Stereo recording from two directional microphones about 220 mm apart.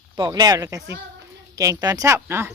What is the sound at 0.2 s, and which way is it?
Speech, 20° right (ahead or behind).